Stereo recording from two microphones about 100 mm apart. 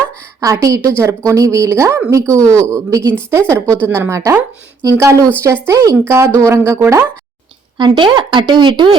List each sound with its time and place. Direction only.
0.4 s a woman's voice: 35° right (ahead or behind)
7.8 s speech: 50° right (ahead or behind)